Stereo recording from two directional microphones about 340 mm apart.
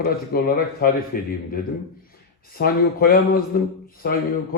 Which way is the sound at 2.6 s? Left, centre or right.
Left.